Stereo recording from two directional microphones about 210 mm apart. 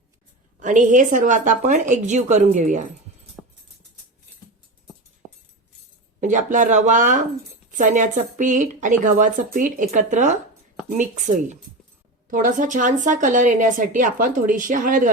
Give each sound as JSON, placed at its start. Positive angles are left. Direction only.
{"t": 0.6, "sound": "a woman's voice", "side_deg": -35}
{"t": 6.1, "sound": "a woman's voice", "side_deg": -35}
{"t": 12.3, "sound": "a woman's voice", "side_deg": -40}